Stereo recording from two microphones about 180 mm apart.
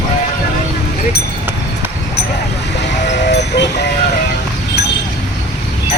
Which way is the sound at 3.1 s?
70° left (ahead or behind).